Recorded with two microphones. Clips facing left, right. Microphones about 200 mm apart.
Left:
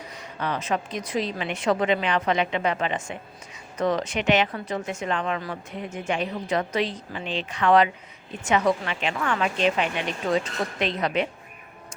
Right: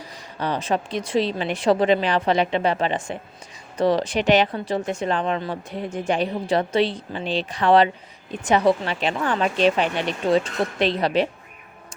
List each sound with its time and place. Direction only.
0.0 s speech: 35° right (ahead or behind)